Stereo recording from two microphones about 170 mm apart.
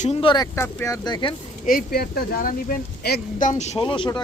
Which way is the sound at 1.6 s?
60° left (ahead or behind).